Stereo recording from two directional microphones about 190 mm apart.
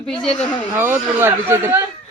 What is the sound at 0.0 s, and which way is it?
Speech, 5° left (ahead or behind).